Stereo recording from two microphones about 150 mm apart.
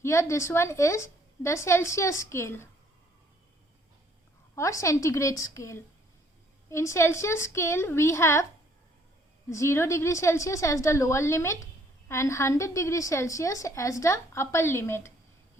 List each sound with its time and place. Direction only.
0.0 s a woman's voice: 20° left (ahead or behind)
4.5 s a woman's voice: 20° left (ahead or behind)
9.5 s a woman's voice: 20° left (ahead or behind)